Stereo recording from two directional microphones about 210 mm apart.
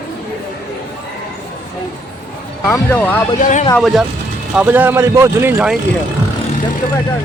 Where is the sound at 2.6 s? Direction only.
10° left (ahead or behind).